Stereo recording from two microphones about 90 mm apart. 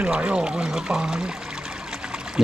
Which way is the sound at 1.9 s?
10° right (ahead or behind).